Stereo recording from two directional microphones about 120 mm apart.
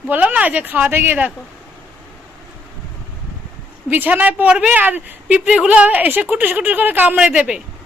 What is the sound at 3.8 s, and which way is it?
A woman's voice, 15° right (ahead or behind).